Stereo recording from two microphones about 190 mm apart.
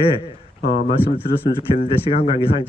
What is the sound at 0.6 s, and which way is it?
Speech, 55° left (ahead or behind).